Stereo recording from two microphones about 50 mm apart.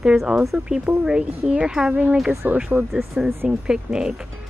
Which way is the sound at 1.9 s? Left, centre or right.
Right.